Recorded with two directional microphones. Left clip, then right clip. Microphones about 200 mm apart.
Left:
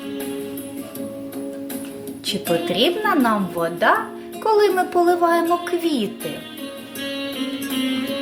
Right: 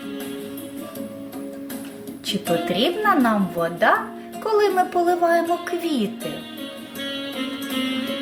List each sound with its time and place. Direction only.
2.2 s a woman's voice: 5° left (ahead or behind)
7.1 s music: 15° left (ahead or behind)